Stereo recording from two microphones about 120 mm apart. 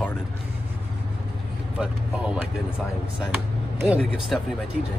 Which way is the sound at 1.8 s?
5° right (ahead or behind).